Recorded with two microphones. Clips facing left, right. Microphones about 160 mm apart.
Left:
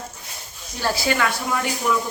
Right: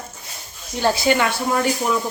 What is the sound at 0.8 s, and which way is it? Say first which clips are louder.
Speech: right 4 dB; 25° right (ahead or behind).